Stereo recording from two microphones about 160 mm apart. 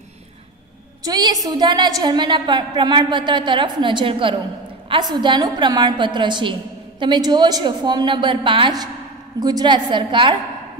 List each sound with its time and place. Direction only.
1.0 s a woman's voice: 25° right (ahead or behind)